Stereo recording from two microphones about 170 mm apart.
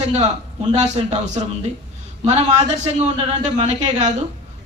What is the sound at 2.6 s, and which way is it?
A man's voice, 45° right (ahead or behind).